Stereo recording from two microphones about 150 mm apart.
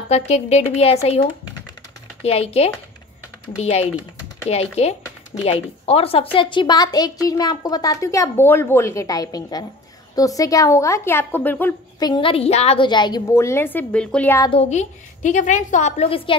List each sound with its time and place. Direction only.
0.1 s a woman's voice: 45° left (ahead or behind); by 11.7 s 10° left (ahead or behind)
12.0 s a woman's voice: 30° left (ahead or behind)
12.8 s a woman's voice: 30° left (ahead or behind); by 14.4 s 10° left (ahead or behind)
14.5 s a woman's voice: 45° left (ahead or behind)